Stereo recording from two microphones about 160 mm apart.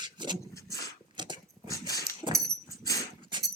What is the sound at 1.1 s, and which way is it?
Dog, 30° right (ahead or behind).